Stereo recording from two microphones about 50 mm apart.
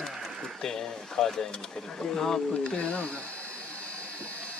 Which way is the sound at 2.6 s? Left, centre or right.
Left.